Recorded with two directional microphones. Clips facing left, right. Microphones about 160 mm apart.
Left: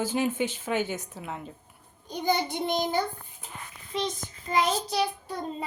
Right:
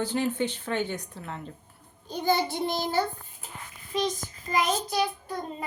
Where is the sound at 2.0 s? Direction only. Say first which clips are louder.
Right 1 dB; 15° left (ahead or behind).